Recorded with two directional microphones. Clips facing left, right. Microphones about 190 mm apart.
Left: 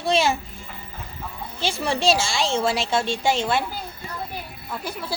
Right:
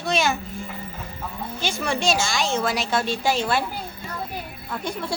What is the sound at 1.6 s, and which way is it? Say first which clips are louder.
A woman's voice: left 2 dB; 30° left (ahead or behind).